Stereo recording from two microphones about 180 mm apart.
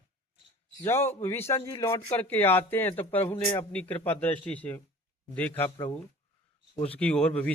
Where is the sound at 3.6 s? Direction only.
10° left (ahead or behind).